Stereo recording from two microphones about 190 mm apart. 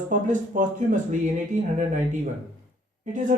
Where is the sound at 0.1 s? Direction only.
40° right (ahead or behind).